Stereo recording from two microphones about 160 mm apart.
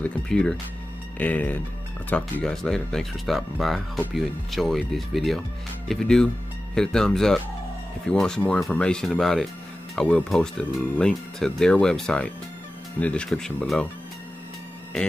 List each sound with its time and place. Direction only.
0.0 s speech: 5° left (ahead or behind)